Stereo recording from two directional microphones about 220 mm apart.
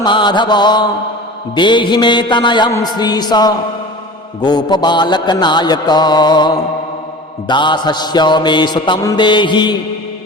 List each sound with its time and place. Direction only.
0.0 s music: 20° left (ahead or behind)